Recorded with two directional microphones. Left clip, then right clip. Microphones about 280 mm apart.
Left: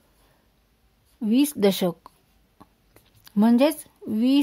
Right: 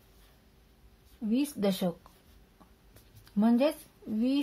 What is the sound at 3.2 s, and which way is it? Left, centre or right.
A woman's voice, left.